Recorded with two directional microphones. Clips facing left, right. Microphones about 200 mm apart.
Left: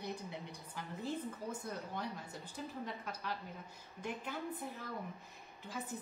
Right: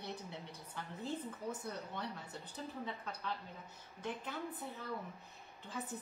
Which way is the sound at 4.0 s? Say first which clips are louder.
Even; 10° left (ahead or behind).